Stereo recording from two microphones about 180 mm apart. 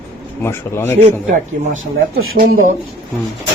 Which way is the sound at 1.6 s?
45° right (ahead or behind).